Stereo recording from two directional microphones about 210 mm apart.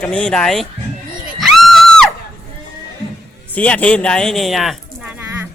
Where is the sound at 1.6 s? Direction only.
Centre (ahead or behind).